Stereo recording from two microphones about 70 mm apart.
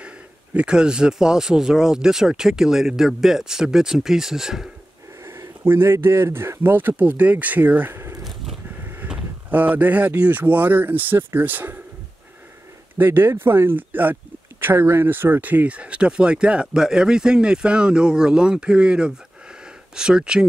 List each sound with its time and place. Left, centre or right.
0.6 s speech: centre
5.6 s speech: right
9.5 s speech: right
12.9 s speech: right; by 20.4 s centre